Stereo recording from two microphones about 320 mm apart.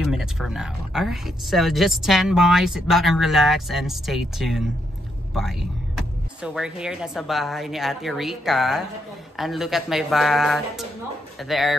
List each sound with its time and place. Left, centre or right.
0.0 s speech: centre